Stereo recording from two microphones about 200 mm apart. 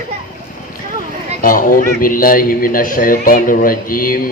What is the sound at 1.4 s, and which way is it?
A man's voice, 45° left (ahead or behind).